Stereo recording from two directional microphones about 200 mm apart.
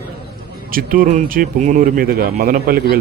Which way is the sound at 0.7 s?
45° right (ahead or behind).